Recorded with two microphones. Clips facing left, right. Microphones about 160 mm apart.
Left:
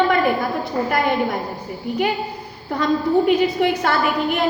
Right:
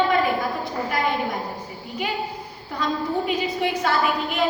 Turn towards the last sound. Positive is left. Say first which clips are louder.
# left 3 dB
turn(degrees=60)  # may be behind; listen again after turning